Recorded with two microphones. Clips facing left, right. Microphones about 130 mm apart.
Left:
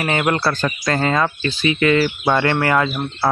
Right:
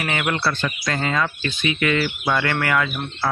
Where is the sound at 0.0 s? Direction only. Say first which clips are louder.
Left 4 dB; 35° left (ahead or behind).